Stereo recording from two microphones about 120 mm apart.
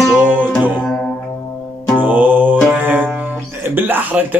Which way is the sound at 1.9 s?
15° right (ahead or behind).